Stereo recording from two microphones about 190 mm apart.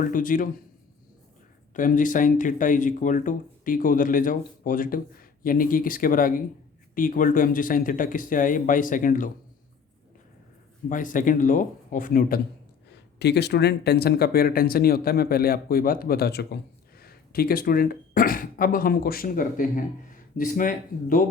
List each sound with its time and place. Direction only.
0.0 s speech: 45° left (ahead or behind)
1.7 s speech: 45° left (ahead or behind)
10.8 s speech: 45° left (ahead or behind)
12.9 s speech: 60° left (ahead or behind); by 21.2 s 45° left (ahead or behind)